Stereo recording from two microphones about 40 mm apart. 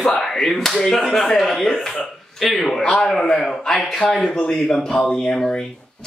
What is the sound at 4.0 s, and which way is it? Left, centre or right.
Speech, centre.